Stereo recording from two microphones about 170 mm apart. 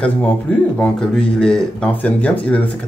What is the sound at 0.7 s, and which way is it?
Speech, 5° left (ahead or behind).